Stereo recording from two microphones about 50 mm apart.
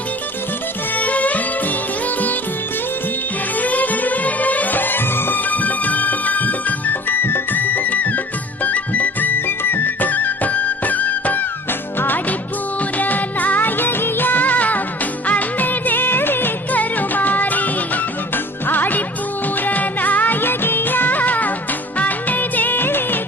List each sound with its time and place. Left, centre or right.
0.9 s music: left
3.6 s music: left
7.2 s music: left
9.5 s music: left
19.6 s music of bollywood: left
21.9 s music: left